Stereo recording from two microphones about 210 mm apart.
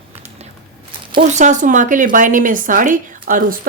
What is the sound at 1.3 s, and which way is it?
A woman's voice, 35° right (ahead or behind).